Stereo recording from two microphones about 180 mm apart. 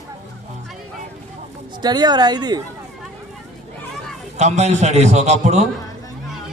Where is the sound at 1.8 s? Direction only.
25° right (ahead or behind).